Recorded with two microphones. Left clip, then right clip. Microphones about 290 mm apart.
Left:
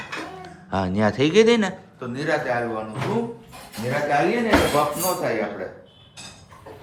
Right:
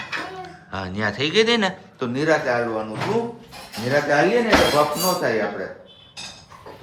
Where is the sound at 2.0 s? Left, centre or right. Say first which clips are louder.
Right 5 dB; right.